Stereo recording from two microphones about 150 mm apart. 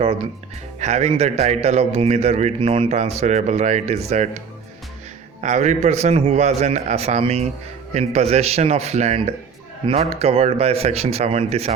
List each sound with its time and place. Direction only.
0.8 s a man's voice: 50° right (ahead or behind)
5.4 s a man's voice: 50° right (ahead or behind)